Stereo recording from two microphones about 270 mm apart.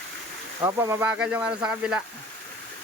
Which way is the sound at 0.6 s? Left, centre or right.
Centre.